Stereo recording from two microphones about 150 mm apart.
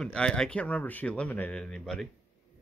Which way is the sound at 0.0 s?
5° left (ahead or behind).